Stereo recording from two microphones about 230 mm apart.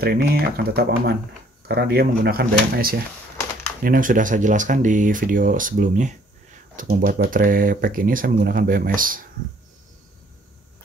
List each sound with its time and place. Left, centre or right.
0.0 s speech: right